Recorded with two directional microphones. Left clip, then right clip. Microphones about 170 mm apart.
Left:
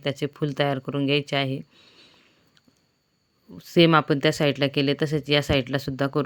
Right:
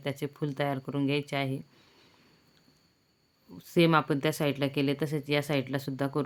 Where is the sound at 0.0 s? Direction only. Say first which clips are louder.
Left 7 dB; 25° left (ahead or behind).